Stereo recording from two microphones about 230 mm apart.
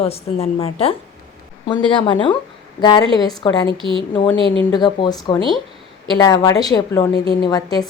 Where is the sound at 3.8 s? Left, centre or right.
Right.